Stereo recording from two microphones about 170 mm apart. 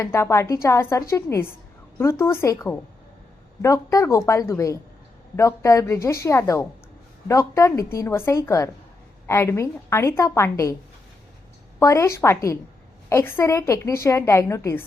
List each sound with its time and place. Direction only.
0.0 s a woman's voice: 15° left (ahead or behind)
11.8 s a woman's voice: 15° left (ahead or behind)